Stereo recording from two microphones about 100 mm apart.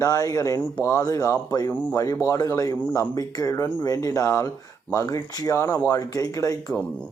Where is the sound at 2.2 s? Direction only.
35° left (ahead or behind).